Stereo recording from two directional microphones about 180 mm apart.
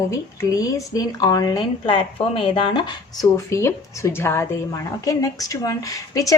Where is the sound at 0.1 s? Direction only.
20° left (ahead or behind).